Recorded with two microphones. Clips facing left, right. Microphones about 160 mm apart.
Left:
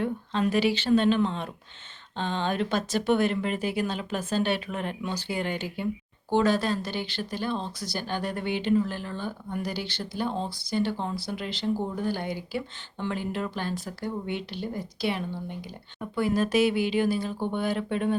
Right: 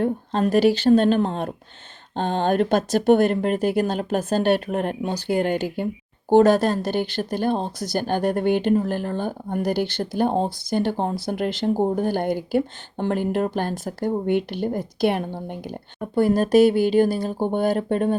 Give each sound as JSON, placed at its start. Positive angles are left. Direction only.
{"t": 0.0, "sound": "speech", "side_deg": -45}